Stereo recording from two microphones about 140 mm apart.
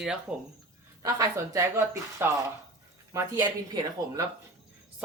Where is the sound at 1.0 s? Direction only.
20° right (ahead or behind).